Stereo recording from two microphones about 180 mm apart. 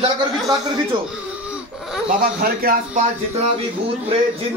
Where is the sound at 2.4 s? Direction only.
55° right (ahead or behind).